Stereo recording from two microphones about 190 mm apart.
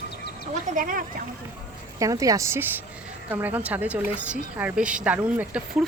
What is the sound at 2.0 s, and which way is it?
A woman's voice, 20° right (ahead or behind).